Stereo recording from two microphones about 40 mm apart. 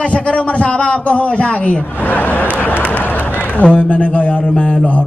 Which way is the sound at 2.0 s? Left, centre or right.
Left.